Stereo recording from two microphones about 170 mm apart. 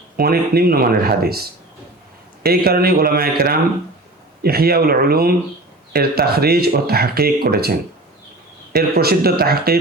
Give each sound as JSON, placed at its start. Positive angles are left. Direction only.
{"t": 0.2, "sound": "speech", "side_deg": -65}